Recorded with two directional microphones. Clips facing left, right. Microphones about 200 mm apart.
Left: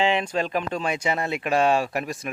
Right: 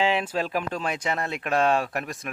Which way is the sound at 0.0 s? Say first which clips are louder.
Left 2 dB; 5° right (ahead or behind).